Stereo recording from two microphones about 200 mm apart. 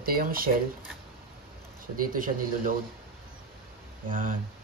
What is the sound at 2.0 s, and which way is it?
Speech, 45° right (ahead or behind).